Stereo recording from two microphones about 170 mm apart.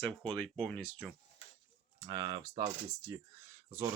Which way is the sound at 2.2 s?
35° right (ahead or behind).